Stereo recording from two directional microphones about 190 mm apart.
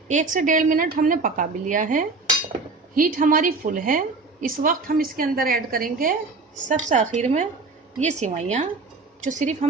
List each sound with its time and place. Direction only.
0.1 s a woman's voice: 40° right (ahead or behind)